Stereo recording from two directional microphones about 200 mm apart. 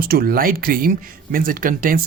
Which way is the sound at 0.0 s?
50° right (ahead or behind).